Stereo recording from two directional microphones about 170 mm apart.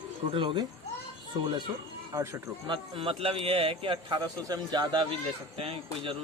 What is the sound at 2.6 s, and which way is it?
A man's voice, 30° right (ahead or behind).